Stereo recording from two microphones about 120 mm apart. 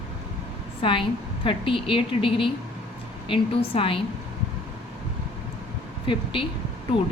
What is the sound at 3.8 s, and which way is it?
Speech, 45° left (ahead or behind).